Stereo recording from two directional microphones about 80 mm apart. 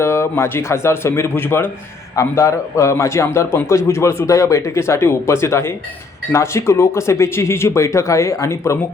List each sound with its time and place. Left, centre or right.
0.0 s a man's voice: left
2.1 s a man's voice: left